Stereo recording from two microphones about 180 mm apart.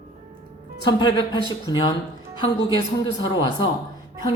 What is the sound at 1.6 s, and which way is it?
Speech, 25° left (ahead or behind).